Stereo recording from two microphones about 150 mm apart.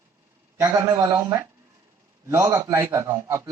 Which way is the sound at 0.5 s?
25° right (ahead or behind).